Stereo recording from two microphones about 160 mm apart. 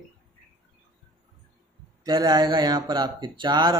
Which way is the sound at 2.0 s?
25° right (ahead or behind).